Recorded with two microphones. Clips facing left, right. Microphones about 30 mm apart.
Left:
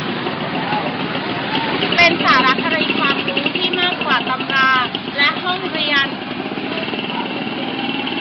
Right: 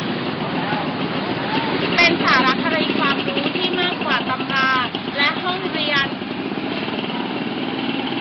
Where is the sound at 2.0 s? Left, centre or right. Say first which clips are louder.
Left 3 dB; centre.